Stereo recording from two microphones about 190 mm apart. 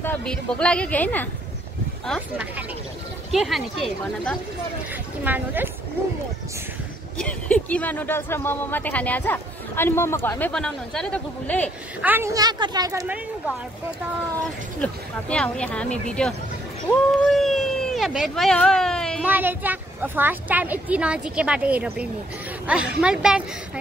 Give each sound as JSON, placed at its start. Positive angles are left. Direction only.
{"t": 0.0, "sound": "speech", "side_deg": 5}
{"t": 3.3, "sound": "speech", "side_deg": 0}
{"t": 5.2, "sound": "a woman's voice", "side_deg": -10}
{"t": 7.2, "sound": "speech", "side_deg": 5}
{"t": 12.0, "sound": "speech", "side_deg": -10}
{"t": 14.8, "sound": "speech", "side_deg": 5}
{"t": 19.2, "sound": "a woman's voice", "side_deg": -10}